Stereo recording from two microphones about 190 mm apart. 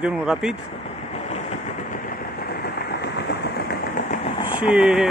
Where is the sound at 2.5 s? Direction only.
60° left (ahead or behind); by 4.3 s 40° left (ahead or behind).